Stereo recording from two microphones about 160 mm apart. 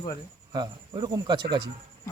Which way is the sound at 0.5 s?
25° right (ahead or behind).